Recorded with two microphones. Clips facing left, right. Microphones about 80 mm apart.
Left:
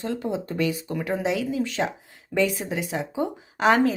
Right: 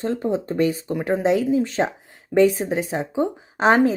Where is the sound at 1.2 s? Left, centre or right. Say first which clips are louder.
Right 9 dB; right.